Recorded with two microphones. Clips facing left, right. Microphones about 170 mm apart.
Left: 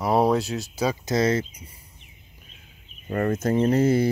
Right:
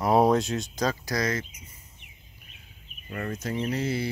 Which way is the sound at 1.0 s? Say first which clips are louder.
Left 7 dB; 25° left (ahead or behind).